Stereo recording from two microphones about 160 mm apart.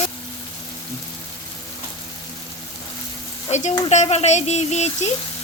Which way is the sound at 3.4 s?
45° left (ahead or behind).